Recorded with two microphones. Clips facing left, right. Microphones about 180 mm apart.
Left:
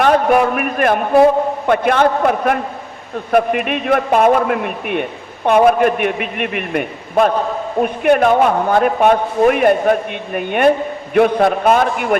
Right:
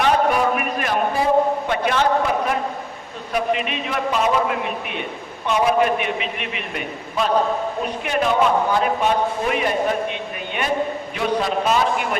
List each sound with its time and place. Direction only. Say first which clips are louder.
0.0 s a man's voice: left 5 dB; 55° left (ahead or behind)